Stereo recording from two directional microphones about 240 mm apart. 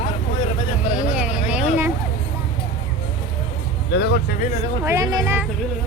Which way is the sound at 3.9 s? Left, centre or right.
Left.